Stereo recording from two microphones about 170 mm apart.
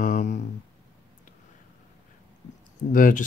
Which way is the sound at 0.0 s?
45° left (ahead or behind).